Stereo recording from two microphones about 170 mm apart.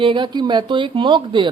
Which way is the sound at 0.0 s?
30° right (ahead or behind).